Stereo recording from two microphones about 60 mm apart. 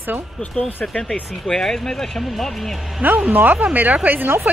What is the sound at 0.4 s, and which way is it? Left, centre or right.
Speech, left.